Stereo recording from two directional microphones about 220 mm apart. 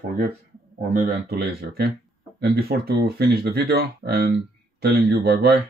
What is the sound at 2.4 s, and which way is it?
Speech, 45° right (ahead or behind).